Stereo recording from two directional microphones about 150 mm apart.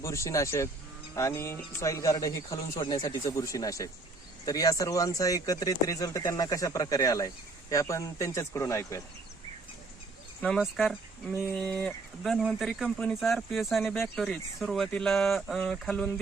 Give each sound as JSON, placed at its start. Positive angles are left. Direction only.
{"t": 0.0, "sound": "speech", "side_deg": 20}
{"t": 10.6, "sound": "speech", "side_deg": 0}